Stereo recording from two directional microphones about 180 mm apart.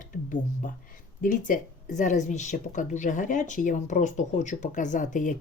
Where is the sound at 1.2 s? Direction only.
45° left (ahead or behind).